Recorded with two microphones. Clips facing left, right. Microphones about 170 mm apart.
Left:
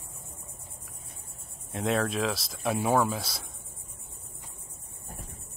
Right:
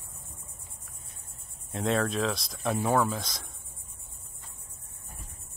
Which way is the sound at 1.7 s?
Centre (ahead or behind).